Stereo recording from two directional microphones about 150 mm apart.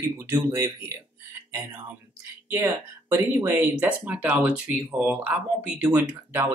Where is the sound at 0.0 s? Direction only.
15° right (ahead or behind).